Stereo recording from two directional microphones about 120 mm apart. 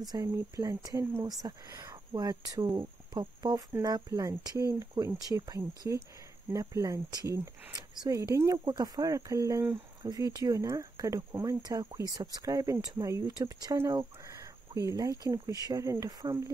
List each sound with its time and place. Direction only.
0.0 s speech: 30° right (ahead or behind)